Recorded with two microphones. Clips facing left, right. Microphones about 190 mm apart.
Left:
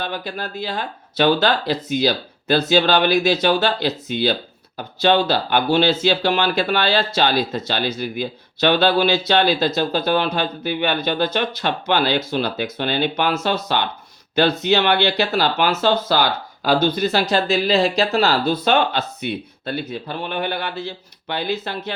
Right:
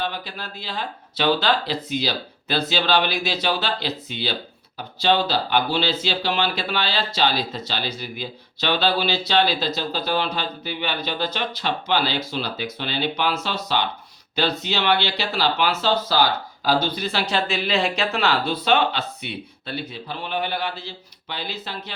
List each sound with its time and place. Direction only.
0.0 s speech: 50° left (ahead or behind)